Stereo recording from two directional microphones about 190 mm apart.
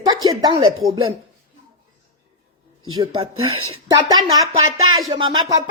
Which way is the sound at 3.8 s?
20° right (ahead or behind).